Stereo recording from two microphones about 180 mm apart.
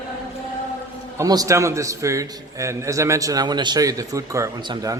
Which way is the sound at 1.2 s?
20° right (ahead or behind).